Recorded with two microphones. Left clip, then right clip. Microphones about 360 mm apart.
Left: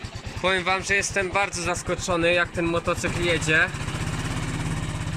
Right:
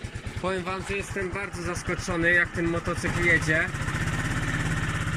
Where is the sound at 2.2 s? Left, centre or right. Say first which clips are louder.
Even; left.